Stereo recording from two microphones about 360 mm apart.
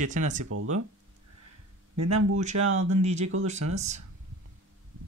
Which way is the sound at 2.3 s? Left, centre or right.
Centre.